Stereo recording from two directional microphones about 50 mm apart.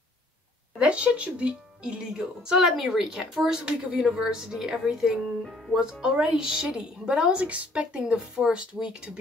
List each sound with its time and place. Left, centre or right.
0.7 s speech: right
2.7 s a woman's voice: centre
5.8 s a woman's voice: centre